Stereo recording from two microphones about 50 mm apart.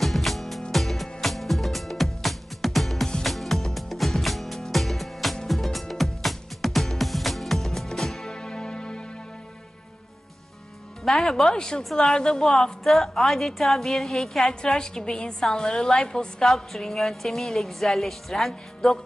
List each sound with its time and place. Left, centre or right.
0.0 s music: centre
11.1 s a woman's voice: centre
12.8 s a woman's voice: centre